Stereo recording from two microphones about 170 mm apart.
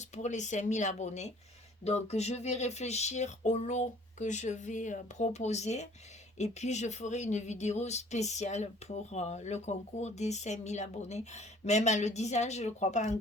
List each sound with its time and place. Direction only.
0.0 s speech: 45° left (ahead or behind)